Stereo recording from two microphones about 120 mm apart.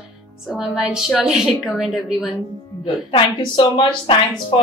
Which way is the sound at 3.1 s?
45° left (ahead or behind).